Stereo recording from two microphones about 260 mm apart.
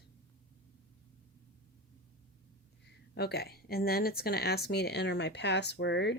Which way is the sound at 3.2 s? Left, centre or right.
Left.